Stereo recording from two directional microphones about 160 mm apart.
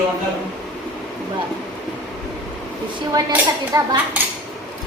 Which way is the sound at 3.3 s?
10° right (ahead or behind).